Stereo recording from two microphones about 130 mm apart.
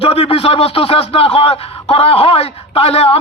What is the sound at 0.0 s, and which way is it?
A man's voice, 50° left (ahead or behind).